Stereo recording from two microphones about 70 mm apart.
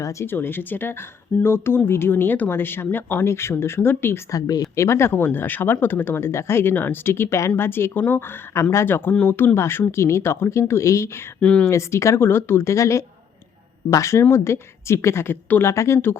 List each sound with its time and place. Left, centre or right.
0.0 s speech: left
0.3 s speech: left
4.3 s speech: left
4.7 s speech: left
11.3 s speech: centre
11.7 s speech: left
15.7 s speech: left